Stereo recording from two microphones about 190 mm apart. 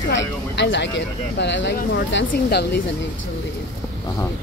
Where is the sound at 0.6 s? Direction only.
70° left (ahead or behind).